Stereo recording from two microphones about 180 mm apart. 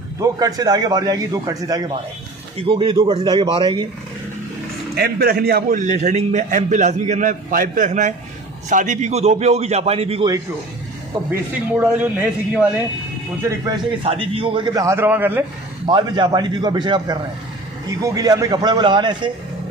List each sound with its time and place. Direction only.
0.2 s a man's voice: 20° right (ahead or behind)
4.9 s a man's voice: 60° right (ahead or behind); by 10.2 s 35° right (ahead or behind)
11.2 s a man's voice: 10° right (ahead or behind)
13.5 s a man's voice: 25° right (ahead or behind)
15.9 s a man's voice: 25° right (ahead or behind)